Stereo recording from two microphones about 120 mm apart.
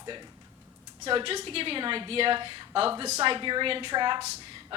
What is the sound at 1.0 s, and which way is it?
A woman's voice, 50° right (ahead or behind).